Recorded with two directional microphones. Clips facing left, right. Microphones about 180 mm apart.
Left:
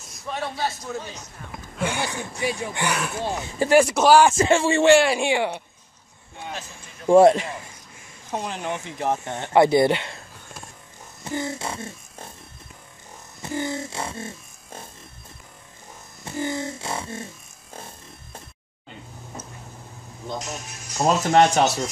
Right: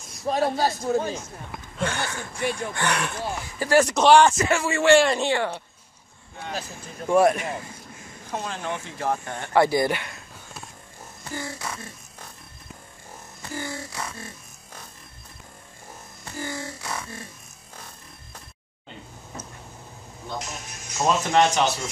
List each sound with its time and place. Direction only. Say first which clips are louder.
0.3 s a man's voice: right 5 dB; 40° right (ahead or behind)
1.8 s speech: left 2 dB; 10° left (ahead or behind)
2.3 s speech: right 1 dB; centre (ahead or behind)
3.3 s speech: left 5 dB; 25° left (ahead or behind)
3.7 s speech: left 1 dB; 10° left (ahead or behind)
4.4 s speech: left 5 dB; 30° left (ahead or behind)
4.9 s speech: left 1 dB; 5° left (ahead or behind)
7.1 s speech: left 5 dB; 25° left (ahead or behind)
11.2 s a sound: left 5 dB; 20° left (ahead or behind)
13.4 s music: left 6 dB; 20° left (ahead or behind)
16.3 s speech: left 6 dB; 20° left (ahead or behind)
17.7 s music: left 5 dB; 25° left (ahead or behind)
21.0 s speech: left 3 dB; 40° left (ahead or behind)